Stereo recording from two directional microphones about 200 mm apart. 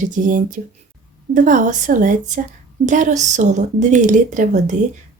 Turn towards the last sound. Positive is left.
turn(degrees=-40)  # may be behind; listen again after turning